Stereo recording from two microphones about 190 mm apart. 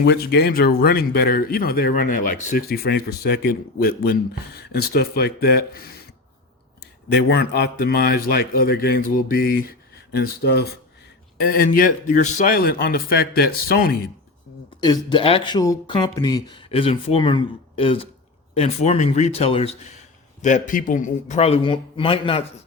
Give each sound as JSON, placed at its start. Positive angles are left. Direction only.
{"t": 0.0, "sound": "speech", "side_deg": 60}
{"t": 7.1, "sound": "speech", "side_deg": 60}
{"t": 14.8, "sound": "a man's voice", "side_deg": 20}
{"t": 20.4, "sound": "a man's voice", "side_deg": 45}